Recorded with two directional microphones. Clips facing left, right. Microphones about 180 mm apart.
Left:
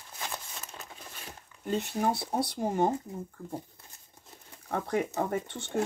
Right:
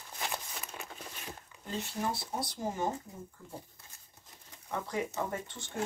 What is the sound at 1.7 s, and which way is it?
Speech, 60° left (ahead or behind).